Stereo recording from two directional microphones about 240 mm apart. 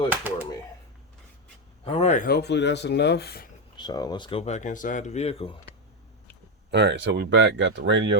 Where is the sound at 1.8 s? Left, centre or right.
Left.